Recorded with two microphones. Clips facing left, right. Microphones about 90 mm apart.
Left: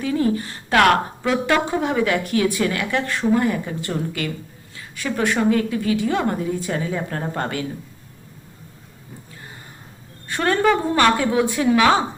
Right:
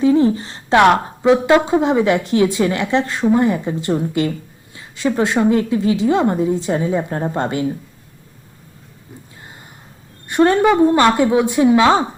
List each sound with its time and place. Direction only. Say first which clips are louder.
0.0 s a woman's voice: right 7 dB; 25° right (ahead or behind)
10.2 s a woman's voice: right 5 dB; 20° right (ahead or behind)